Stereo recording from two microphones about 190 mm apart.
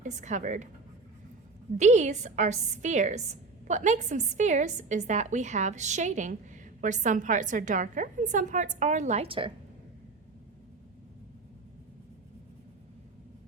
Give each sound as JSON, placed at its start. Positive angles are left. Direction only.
{"t": 0.0, "sound": "a woman's voice", "side_deg": -40}
{"t": 1.8, "sound": "a woman's voice", "side_deg": -40}